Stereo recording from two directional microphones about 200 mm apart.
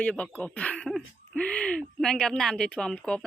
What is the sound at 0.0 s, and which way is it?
Speech, 5° left (ahead or behind).